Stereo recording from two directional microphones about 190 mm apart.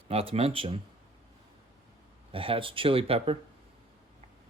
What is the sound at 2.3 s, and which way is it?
Speech, 30° right (ahead or behind).